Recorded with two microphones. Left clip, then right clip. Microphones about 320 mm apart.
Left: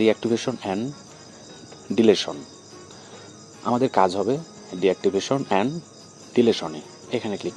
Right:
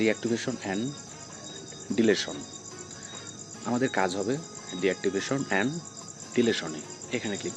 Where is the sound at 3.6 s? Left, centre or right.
Left.